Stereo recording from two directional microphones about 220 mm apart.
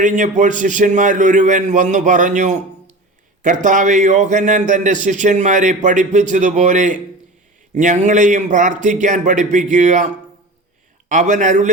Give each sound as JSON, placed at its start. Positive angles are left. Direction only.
{"t": 0.0, "sound": "a man's voice", "side_deg": -35}
{"t": 11.1, "sound": "a man's voice", "side_deg": -35}